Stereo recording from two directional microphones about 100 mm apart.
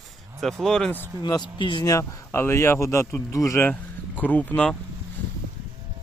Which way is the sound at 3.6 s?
15° left (ahead or behind).